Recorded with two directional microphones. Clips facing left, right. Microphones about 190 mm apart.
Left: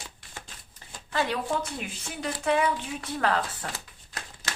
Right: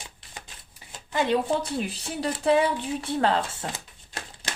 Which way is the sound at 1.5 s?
35° right (ahead or behind).